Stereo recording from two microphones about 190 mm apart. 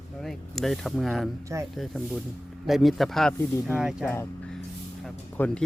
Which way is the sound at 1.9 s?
5° left (ahead or behind).